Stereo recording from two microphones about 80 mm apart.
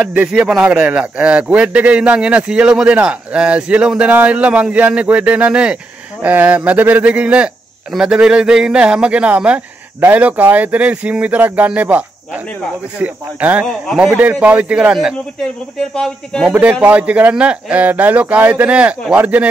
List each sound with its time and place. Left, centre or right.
0.0 s a man's voice: centre
13.0 s a man's voice: centre
16.8 s a man's voice: centre